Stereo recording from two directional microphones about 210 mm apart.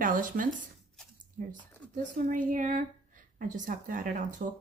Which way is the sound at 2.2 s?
40° right (ahead or behind).